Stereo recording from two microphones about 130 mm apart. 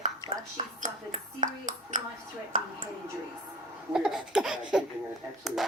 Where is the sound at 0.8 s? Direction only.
80° right.